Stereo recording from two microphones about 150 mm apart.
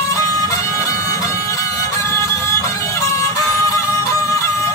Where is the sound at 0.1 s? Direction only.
20° left (ahead or behind).